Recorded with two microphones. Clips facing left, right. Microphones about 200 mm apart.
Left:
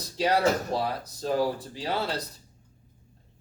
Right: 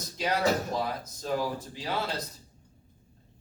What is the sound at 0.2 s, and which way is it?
A man's voice, 35° left (ahead or behind).